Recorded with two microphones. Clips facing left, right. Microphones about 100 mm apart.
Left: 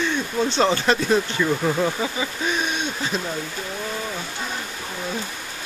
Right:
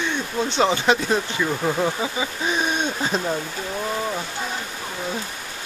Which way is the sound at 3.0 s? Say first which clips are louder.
Right 2 dB; 40° right (ahead or behind).